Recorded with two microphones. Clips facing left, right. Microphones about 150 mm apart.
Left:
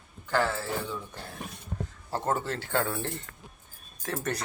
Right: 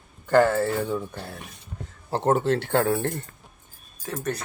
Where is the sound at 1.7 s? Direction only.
60° left (ahead or behind).